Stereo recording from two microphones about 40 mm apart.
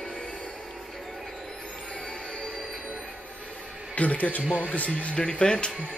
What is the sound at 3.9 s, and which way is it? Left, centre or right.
Speech, left.